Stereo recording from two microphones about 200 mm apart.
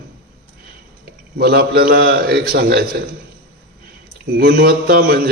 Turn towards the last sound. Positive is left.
turn(degrees=-50)  # may be behind; listen again after turning